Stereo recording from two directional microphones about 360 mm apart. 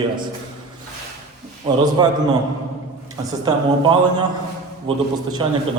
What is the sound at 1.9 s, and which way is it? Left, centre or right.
A man's voice, centre.